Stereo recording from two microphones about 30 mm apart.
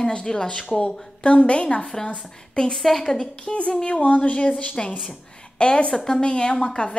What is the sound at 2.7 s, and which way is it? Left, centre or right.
Speech, centre.